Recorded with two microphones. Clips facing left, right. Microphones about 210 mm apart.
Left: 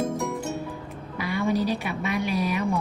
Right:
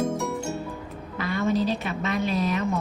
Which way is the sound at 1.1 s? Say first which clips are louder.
Even; 15° left (ahead or behind).